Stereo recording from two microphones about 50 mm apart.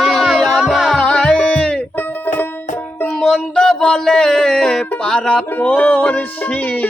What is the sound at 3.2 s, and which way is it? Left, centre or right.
Music, centre.